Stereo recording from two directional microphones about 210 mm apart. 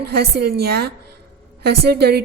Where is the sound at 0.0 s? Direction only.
50° right (ahead or behind).